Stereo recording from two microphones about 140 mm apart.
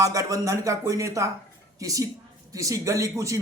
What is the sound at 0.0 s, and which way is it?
A man's voice, 25° right (ahead or behind).